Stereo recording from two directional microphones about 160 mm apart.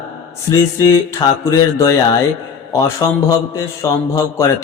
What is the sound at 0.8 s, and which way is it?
A man's voice, 20° left (ahead or behind).